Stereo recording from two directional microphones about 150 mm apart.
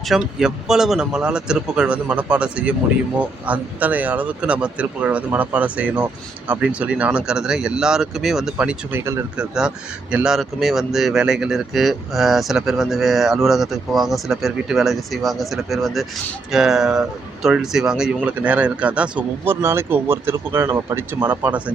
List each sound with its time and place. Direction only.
0.1 s speech: 5° right (ahead or behind)
9.0 s speech: 20° right (ahead or behind)
9.4 s speech: 5° right (ahead or behind)